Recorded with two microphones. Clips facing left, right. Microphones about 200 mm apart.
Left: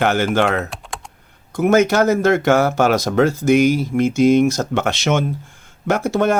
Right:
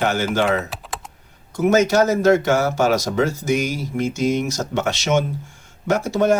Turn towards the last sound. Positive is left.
turn(degrees=55)  # may be behind; listen again after turning